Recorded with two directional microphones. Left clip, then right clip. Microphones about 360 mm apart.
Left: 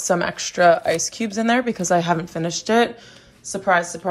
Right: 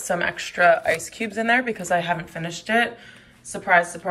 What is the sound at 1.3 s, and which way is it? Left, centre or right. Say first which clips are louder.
Speech: even; left.